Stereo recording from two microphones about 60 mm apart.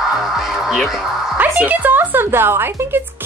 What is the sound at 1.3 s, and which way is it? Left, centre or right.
Speech, right.